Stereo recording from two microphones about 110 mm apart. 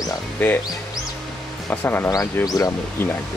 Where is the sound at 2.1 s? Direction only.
35° left (ahead or behind).